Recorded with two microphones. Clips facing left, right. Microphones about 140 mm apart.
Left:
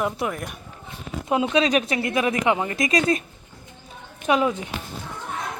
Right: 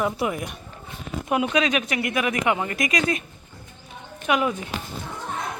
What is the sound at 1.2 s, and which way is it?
Speech, 25° left (ahead or behind).